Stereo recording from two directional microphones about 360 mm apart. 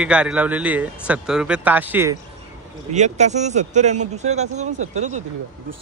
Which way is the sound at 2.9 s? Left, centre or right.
Centre.